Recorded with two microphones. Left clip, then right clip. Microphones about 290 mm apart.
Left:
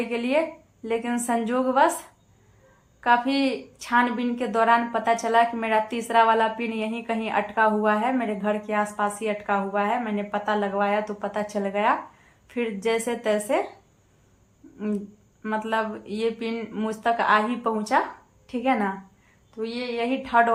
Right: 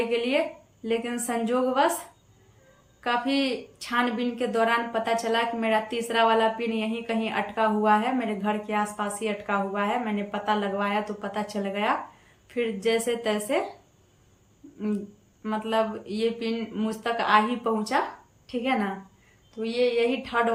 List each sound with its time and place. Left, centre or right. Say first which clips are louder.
0.1 s a woman's voice: left 1 dB; centre
3.0 s a woman's voice: left 5 dB; centre
15.4 s a woman's voice: even; centre